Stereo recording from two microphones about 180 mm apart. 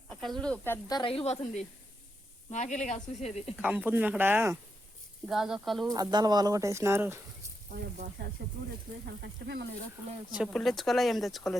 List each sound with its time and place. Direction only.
0.1 s speech: centre (ahead or behind)
0.9 s speech: 30° left (ahead or behind)
3.6 s speech: 5° right (ahead or behind)
5.9 s speech: 20° right (ahead or behind)
9.2 s speech: 65° right (ahead or behind)
10.3 s speech: centre (ahead or behind)